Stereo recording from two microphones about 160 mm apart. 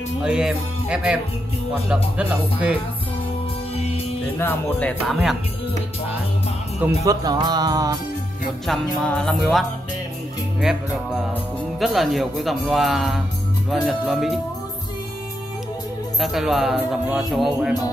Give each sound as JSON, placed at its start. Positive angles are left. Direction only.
{"t": 0.2, "sound": "music", "side_deg": -5}
{"t": 1.9, "sound": "speech", "side_deg": -5}
{"t": 3.7, "sound": "music", "side_deg": 40}
{"t": 4.4, "sound": "speech", "side_deg": 10}
{"t": 5.1, "sound": "music", "side_deg": 0}
{"t": 7.1, "sound": "music", "side_deg": -25}
{"t": 8.6, "sound": "music", "side_deg": 5}
{"t": 11.8, "sound": "music", "side_deg": 0}
{"t": 16.2, "sound": "music", "side_deg": 0}